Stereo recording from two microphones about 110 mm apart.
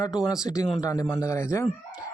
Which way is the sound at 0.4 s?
30° left (ahead or behind).